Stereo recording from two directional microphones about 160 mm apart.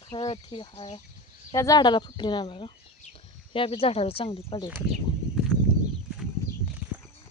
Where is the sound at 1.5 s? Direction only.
25° left (ahead or behind).